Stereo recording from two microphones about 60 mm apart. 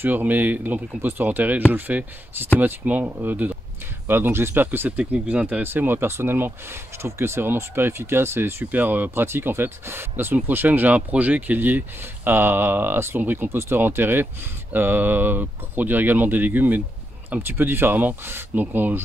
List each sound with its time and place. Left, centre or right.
0.0 s speech: right
2.8 s speech: right
3.1 s speech: right
4.1 s speech: right
5.7 s speech: right